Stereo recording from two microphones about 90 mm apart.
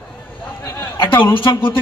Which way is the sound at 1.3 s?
75° left (ahead or behind).